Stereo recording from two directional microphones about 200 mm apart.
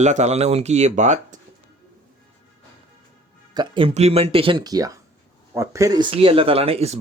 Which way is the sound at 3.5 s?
25° right (ahead or behind).